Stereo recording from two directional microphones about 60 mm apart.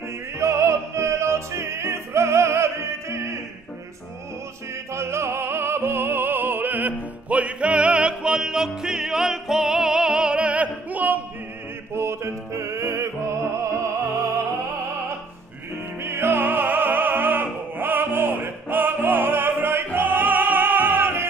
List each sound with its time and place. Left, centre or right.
0.4 s opera: right
4.9 s music: right
11.9 s music: right
16.0 s opera: right